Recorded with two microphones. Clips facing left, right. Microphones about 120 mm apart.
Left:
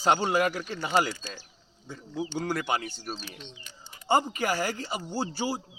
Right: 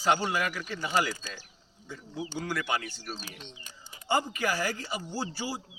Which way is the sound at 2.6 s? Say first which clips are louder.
Left 2 dB; 20° left (ahead or behind).